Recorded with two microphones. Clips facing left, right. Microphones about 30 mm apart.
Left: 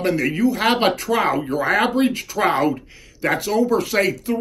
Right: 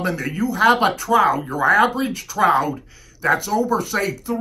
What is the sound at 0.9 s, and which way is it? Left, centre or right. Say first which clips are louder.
Speech: right 3 dB; left.